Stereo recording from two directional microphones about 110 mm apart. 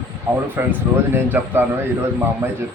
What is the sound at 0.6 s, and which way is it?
A man's voice, 20° right (ahead or behind).